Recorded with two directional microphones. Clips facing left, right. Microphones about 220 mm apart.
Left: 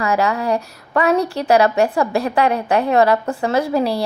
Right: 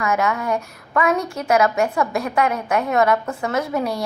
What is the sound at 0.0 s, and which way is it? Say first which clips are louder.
A woman's voice: left 3 dB; 35° left (ahead or behind).